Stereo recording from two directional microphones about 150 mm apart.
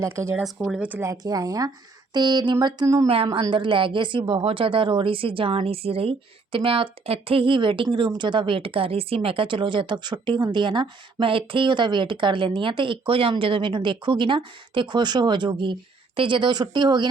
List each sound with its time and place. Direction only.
0.0 s speech: 20° right (ahead or behind)
0.3 s speech: centre (ahead or behind)
1.1 s a woman's voice: 25° right (ahead or behind)